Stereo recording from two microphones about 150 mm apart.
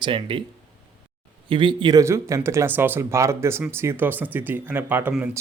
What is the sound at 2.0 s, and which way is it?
Speech, 20° right (ahead or behind).